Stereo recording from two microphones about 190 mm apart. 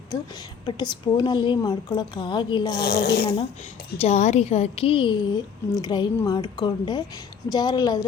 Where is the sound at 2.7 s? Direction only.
60° left (ahead or behind).